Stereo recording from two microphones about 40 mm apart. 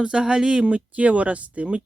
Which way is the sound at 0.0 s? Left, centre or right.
Right.